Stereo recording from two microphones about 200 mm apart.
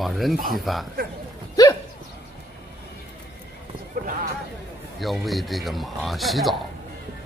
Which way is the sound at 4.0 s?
45° right (ahead or behind).